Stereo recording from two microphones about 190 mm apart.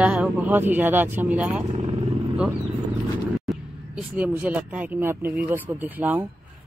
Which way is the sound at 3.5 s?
5° right (ahead or behind).